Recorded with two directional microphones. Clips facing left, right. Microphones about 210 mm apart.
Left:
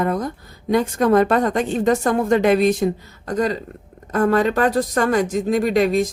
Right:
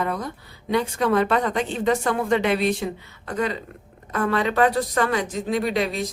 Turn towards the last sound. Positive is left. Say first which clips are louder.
# left 6 dB
turn(degrees=45)  # may be behind; listen again after turning